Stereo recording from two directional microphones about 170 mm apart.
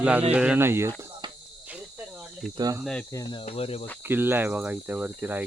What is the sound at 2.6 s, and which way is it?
Speech, 20° right (ahead or behind).